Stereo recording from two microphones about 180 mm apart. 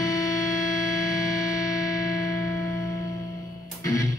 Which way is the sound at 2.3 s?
20° left (ahead or behind).